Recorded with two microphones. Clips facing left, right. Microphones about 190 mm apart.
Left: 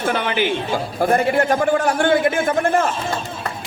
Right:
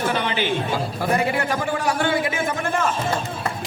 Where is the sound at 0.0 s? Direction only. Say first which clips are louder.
Left 2 dB; 50° left (ahead or behind).